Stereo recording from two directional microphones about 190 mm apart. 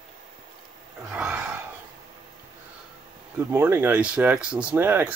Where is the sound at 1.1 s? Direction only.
5° right (ahead or behind).